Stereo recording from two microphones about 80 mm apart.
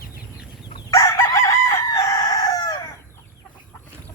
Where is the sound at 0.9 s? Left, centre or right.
Left.